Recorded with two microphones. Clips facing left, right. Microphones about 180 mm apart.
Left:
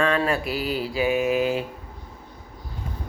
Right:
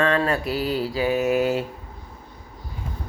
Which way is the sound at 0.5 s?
35° right (ahead or behind).